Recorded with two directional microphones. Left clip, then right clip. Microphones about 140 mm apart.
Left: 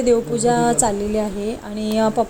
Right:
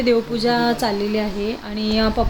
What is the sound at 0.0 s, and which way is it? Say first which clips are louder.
A woman's voice: left 1 dB; 30° left (ahead or behind).